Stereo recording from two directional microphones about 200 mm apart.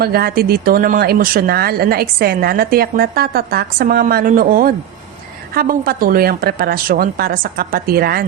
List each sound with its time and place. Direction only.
0.0 s speech: 50° right (ahead or behind)